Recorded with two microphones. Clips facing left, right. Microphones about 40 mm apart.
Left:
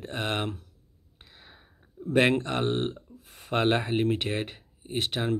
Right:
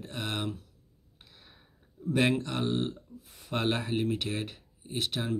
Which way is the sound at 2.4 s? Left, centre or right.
Left.